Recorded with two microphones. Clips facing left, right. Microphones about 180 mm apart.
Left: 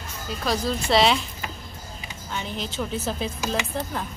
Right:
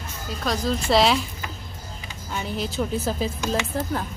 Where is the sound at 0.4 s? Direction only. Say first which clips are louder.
Right 1 dB; centre (ahead or behind).